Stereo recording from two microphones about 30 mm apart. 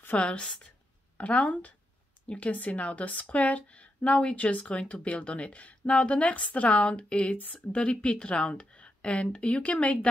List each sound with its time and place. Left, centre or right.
0.1 s a woman's voice: left